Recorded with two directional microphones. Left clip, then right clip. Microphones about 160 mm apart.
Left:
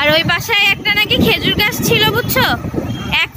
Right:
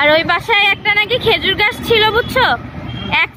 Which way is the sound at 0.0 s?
Centre (ahead or behind).